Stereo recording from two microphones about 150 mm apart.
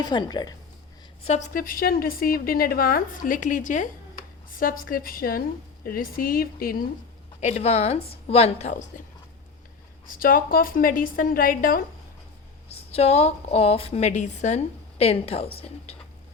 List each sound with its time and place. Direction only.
0.0 s a woman's voice: 30° left (ahead or behind)
1.5 s a woman's voice: 70° left (ahead or behind)
4.5 s a woman's voice: 70° left (ahead or behind)
7.4 s a woman's voice: 45° left (ahead or behind)
10.1 s a woman's voice: 70° left (ahead or behind)
12.6 s a woman's voice: 45° left (ahead or behind)